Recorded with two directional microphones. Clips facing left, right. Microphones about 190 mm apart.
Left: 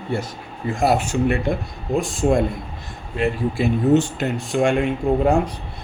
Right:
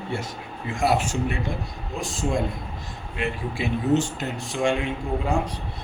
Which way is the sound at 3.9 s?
60° left (ahead or behind).